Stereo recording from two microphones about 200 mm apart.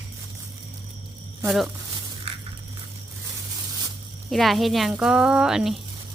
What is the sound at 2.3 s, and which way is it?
Crushing, 30° right (ahead or behind).